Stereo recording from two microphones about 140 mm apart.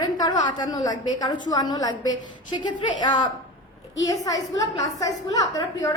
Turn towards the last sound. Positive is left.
turn(degrees=25)  # may be behind; listen again after turning